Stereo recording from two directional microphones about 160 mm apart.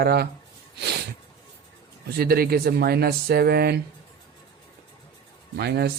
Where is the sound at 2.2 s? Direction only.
70° right (ahead or behind).